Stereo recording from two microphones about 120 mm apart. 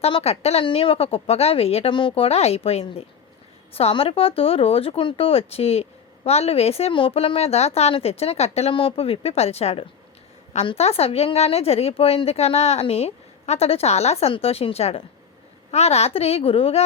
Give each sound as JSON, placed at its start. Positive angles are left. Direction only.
{"t": 0.0, "sound": "speech", "side_deg": 60}